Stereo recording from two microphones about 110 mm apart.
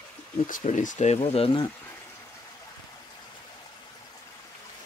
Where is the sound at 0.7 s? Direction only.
90° left; by 1.5 s 65° left (ahead or behind).